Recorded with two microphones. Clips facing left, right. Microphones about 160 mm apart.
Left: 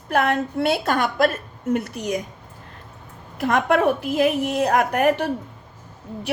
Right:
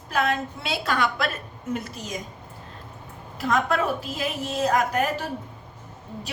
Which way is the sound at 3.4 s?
60° left (ahead or behind).